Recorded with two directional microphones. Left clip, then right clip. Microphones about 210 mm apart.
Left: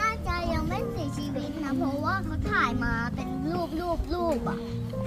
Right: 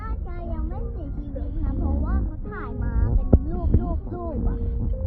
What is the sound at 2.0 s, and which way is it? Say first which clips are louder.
Music: left 6 dB; 35° left (ahead or behind).